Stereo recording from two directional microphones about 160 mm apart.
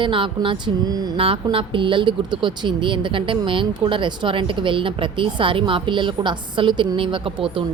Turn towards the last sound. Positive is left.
turn(degrees=-35)  # may be behind; listen again after turning